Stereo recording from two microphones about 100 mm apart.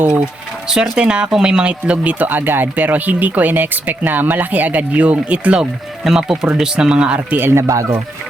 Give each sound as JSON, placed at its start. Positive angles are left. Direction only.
{"t": 0.7, "sound": "speech", "side_deg": -5}
{"t": 7.7, "sound": "speech", "side_deg": -30}